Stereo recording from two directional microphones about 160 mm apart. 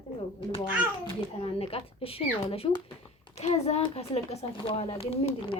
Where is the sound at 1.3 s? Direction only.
35° left (ahead or behind).